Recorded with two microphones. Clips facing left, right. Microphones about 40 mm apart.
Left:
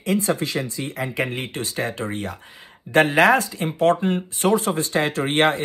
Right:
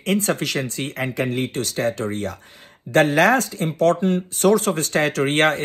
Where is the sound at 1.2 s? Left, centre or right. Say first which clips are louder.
Right 4 dB; left.